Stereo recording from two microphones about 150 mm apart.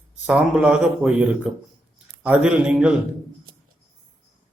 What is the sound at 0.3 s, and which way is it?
A man's voice, 5° right (ahead or behind).